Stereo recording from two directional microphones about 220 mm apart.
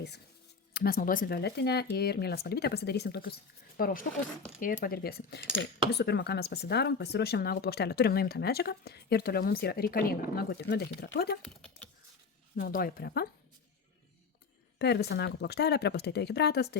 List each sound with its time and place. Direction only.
0.7 s speech: 45° left (ahead or behind)
12.5 s speech: 40° left (ahead or behind)
14.8 s speech: 50° left (ahead or behind)